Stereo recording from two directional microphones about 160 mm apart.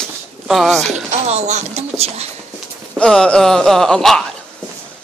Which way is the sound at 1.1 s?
45° right (ahead or behind).